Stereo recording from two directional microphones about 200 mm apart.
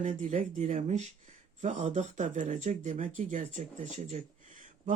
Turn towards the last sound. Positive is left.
turn(degrees=-40)  # may be behind; listen again after turning